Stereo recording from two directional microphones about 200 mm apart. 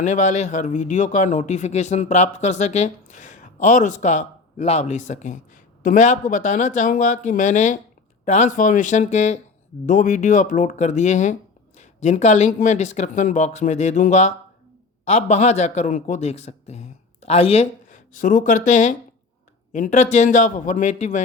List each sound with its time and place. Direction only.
0.0 s a man's voice: 35° left (ahead or behind)